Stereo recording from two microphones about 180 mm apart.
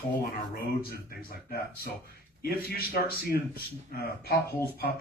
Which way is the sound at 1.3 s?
55° left (ahead or behind).